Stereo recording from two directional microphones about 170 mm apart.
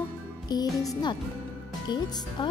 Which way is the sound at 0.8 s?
20° left (ahead or behind).